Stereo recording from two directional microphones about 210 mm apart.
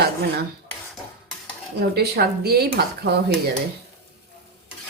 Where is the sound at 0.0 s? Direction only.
50° right (ahead or behind).